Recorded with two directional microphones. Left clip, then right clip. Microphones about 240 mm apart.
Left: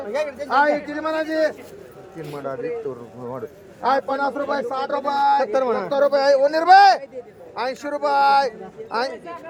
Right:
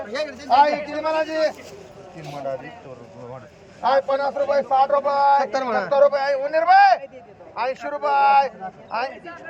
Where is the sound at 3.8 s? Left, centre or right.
Left.